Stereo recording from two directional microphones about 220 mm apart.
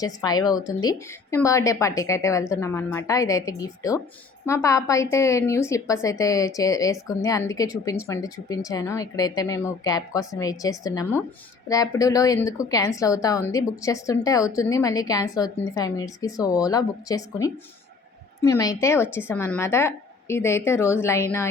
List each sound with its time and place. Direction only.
0.0 s a woman's voice: 15° left (ahead or behind)